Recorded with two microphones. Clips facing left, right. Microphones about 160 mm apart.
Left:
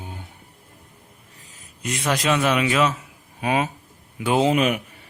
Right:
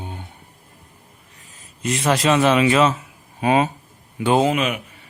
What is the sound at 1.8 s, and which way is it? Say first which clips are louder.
A man's voice: right 4 dB; centre (ahead or behind).